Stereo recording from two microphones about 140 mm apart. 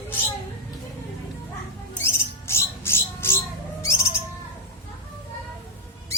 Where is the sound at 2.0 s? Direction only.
20° left (ahead or behind).